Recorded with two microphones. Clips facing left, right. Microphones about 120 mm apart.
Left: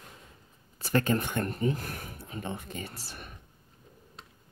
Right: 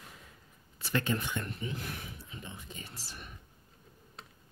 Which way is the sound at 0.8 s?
45° left (ahead or behind).